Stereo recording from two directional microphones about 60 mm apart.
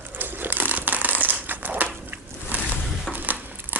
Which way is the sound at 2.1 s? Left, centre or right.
Right.